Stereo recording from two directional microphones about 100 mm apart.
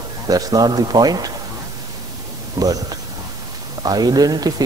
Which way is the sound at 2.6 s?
40° right (ahead or behind).